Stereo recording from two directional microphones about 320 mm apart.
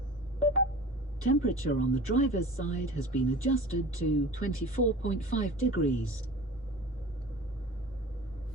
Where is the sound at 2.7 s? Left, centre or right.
Left.